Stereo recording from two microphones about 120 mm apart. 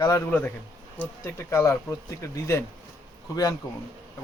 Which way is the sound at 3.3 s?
30° left (ahead or behind).